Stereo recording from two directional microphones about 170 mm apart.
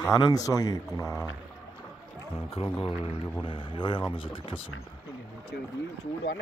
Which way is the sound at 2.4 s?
35° left (ahead or behind).